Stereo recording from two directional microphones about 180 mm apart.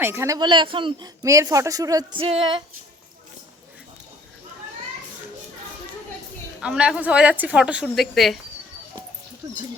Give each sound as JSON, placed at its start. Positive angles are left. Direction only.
{"t": 0.0, "sound": "speech", "side_deg": -15}
{"t": 6.6, "sound": "a woman's voice", "side_deg": -5}